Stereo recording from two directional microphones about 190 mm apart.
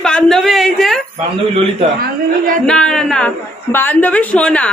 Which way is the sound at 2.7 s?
5° left (ahead or behind).